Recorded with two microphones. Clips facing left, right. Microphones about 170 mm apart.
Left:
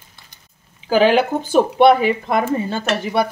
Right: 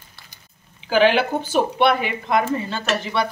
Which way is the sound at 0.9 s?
40° left (ahead or behind).